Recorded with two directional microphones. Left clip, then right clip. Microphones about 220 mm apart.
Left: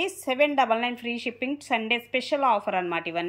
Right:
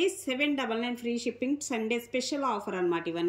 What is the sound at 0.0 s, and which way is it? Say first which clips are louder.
A woman's voice: left 5 dB; 5° left (ahead or behind).